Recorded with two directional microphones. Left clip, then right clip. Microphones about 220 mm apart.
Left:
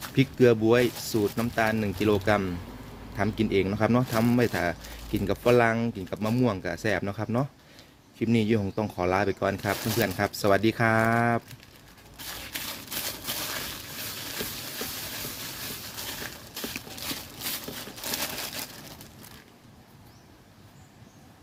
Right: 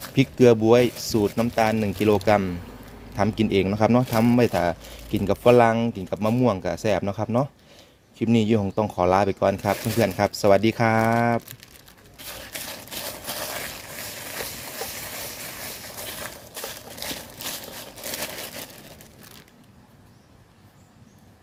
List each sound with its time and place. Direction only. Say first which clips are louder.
0.2 s speech: right 4 dB; 20° right (ahead or behind)